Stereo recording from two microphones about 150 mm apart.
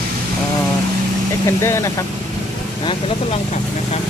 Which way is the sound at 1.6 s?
20° left (ahead or behind).